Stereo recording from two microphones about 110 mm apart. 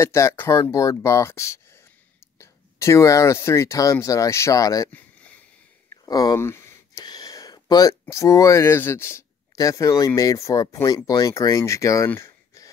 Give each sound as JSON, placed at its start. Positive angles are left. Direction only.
{"t": 0.0, "sound": "speech", "side_deg": 25}
{"t": 4.9, "sound": "a sound", "side_deg": 10}
{"t": 6.0, "sound": "speech", "side_deg": 35}
{"t": 6.3, "sound": "speech", "side_deg": 25}
{"t": 7.0, "sound": "a sound", "side_deg": 35}
{"t": 8.0, "sound": "speech", "side_deg": 25}